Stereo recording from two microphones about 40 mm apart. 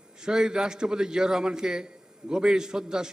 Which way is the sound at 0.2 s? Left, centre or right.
Centre.